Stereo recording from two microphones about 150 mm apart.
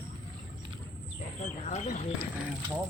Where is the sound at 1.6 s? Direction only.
50° left (ahead or behind).